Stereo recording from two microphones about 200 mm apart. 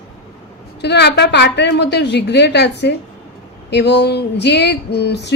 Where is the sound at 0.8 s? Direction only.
60° left (ahead or behind).